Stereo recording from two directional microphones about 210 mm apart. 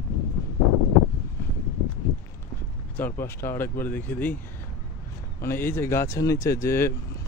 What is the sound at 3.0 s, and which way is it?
Speech, 10° left (ahead or behind).